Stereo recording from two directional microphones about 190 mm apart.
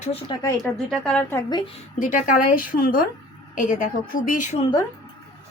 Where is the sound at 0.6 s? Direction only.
5° left (ahead or behind).